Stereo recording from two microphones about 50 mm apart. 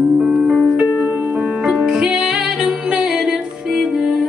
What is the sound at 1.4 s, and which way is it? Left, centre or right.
Music, centre.